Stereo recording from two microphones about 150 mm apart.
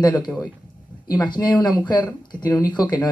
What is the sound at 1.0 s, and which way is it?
Speech, 30° left (ahead or behind).